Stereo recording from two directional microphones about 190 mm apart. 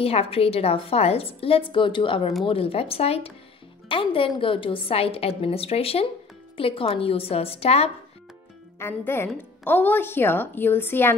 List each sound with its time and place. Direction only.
0.0 s a woman's voice: 30° left (ahead or behind)
8.7 s a woman's voice: 10° left (ahead or behind)